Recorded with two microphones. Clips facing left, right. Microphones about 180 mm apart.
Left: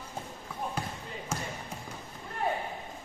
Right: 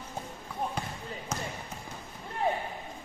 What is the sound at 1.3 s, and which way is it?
Basketball bounce, 10° left (ahead or behind).